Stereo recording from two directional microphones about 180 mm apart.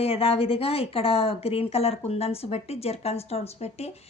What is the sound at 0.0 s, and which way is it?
A woman's voice, 35° left (ahead or behind).